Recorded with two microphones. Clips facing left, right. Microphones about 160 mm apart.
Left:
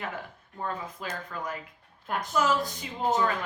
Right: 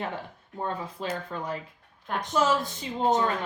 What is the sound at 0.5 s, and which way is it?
Speech, 30° right (ahead or behind).